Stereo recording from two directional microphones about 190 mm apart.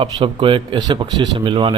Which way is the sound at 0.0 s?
25° right (ahead or behind).